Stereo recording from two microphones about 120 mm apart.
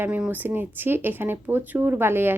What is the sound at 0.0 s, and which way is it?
Speech, 15° right (ahead or behind).